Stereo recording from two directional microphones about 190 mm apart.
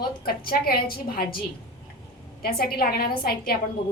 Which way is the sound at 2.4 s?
50° left (ahead or behind).